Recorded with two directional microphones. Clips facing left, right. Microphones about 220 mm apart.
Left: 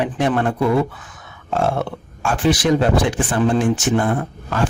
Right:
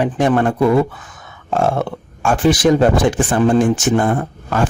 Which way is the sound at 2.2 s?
45° right (ahead or behind).